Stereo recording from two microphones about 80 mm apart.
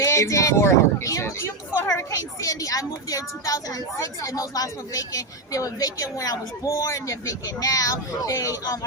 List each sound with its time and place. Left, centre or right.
0.0 s speech: left